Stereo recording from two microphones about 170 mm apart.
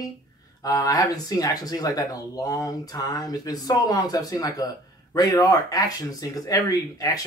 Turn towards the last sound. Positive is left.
turn(degrees=20)  # may be behind; listen again after turning